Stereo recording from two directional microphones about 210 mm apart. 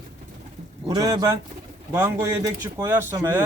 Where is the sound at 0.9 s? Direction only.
20° right (ahead or behind).